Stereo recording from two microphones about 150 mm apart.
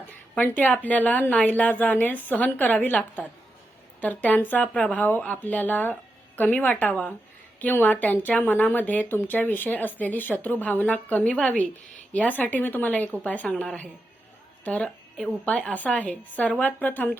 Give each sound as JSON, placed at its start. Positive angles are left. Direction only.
{"t": 0.3, "sound": "speech", "side_deg": 10}